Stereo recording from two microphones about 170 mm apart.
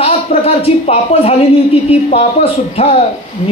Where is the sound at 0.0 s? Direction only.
35° left (ahead or behind).